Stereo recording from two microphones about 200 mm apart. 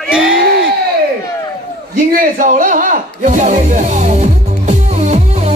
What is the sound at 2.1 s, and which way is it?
Music, 40° right (ahead or behind).